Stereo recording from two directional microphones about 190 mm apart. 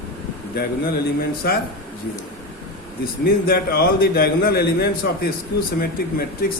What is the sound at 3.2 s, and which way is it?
A man's voice, 50° left (ahead or behind).